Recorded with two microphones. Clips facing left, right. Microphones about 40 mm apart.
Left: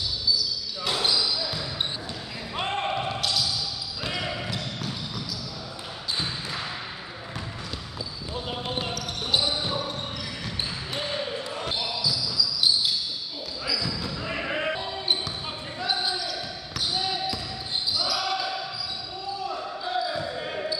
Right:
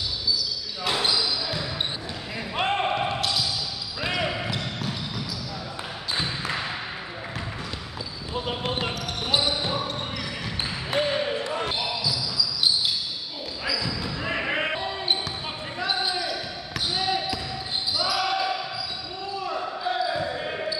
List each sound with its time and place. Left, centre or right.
0.8 s basketball bounce: centre
3.2 s basketball bounce: centre
4.2 s basketball bounce: right
8.3 s basketball bounce: centre
9.6 s basketball bounce: centre
10.9 s basketball bounce: right
11.6 s basketball bounce: centre
13.7 s basketball bounce: centre
15.8 s basketball bounce: centre
19.8 s basketball bounce: centre